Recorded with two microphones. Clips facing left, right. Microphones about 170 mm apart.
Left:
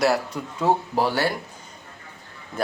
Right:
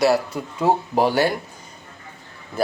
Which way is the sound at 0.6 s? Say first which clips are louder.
Right 3 dB; 15° right (ahead or behind).